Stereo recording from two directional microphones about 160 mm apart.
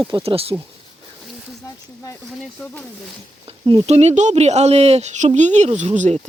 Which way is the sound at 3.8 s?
45° right (ahead or behind).